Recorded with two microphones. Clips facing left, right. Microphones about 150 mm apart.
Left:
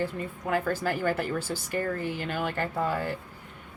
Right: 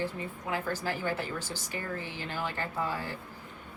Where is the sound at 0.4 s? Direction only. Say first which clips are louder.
Left 6 dB; 50° left (ahead or behind).